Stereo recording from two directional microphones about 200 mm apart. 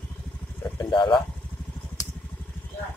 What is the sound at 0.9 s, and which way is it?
Speech, 25° left (ahead or behind).